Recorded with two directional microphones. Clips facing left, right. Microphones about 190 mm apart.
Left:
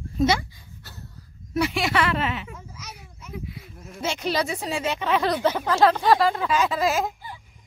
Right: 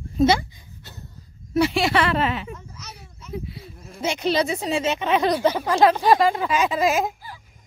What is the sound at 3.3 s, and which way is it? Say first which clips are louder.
Sheep: right 4 dB; 30° right (ahead or behind).